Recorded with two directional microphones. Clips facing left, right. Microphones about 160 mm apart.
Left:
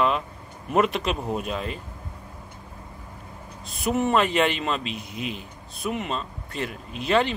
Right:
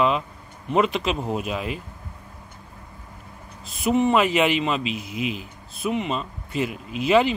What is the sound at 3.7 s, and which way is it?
Speech, centre (ahead or behind).